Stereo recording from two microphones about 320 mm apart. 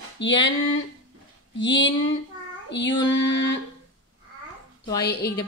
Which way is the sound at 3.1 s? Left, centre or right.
Left.